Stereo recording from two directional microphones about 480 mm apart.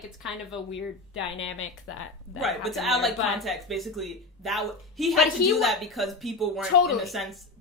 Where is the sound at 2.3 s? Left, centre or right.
Centre.